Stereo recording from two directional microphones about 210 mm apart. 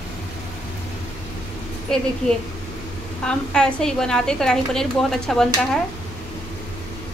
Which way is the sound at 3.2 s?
5° left (ahead or behind).